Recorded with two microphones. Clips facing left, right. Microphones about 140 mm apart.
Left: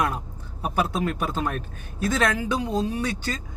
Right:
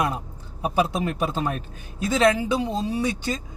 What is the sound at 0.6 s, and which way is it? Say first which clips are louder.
Speech: right 2 dB; 15° right (ahead or behind).